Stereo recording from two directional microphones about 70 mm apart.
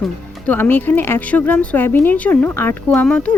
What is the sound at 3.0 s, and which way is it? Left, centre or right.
Speech, centre.